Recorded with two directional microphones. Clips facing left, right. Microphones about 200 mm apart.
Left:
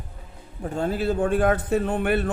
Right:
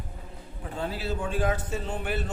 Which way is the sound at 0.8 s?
50° left (ahead or behind).